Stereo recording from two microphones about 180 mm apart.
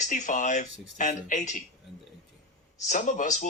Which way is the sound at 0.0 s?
45° left (ahead or behind).